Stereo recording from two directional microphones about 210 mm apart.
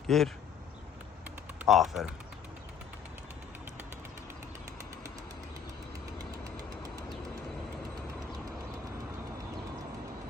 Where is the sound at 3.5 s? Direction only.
10° right (ahead or behind).